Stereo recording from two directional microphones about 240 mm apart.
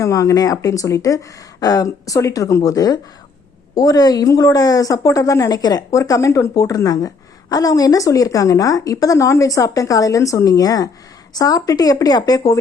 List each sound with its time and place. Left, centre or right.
0.0 s a woman's voice: centre